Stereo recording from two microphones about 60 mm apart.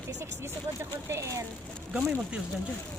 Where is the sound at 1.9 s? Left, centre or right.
Centre.